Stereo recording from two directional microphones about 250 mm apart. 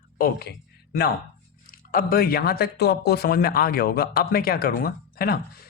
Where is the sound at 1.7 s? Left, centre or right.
Left.